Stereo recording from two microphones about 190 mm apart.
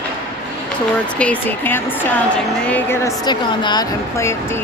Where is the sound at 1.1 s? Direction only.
10° left (ahead or behind).